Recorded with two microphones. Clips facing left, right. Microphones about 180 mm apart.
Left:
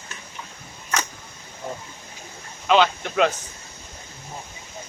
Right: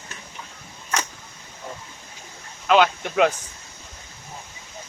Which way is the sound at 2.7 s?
10° right (ahead or behind).